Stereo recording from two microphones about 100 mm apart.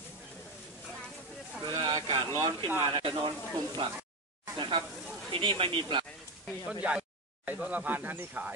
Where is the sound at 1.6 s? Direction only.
45° right (ahead or behind).